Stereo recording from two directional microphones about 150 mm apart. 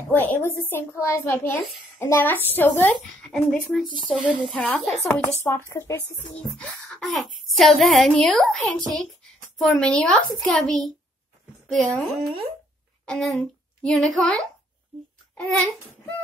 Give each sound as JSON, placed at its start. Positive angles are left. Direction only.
{"t": 0.1, "sound": "a child's voice", "side_deg": 10}
{"t": 4.6, "sound": "a child's voice", "side_deg": 10}
{"t": 6.6, "sound": "a woman's voice", "side_deg": 0}
{"t": 15.3, "sound": "child singing", "side_deg": 5}